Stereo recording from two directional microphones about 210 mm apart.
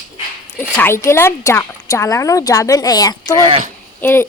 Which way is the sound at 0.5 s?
10° left (ahead or behind).